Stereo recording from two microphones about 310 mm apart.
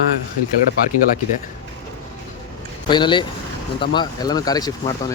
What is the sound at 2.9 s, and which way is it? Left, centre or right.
Speech, centre.